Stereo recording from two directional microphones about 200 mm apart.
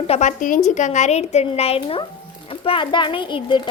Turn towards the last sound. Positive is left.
turn(degrees=25)  # may be behind; listen again after turning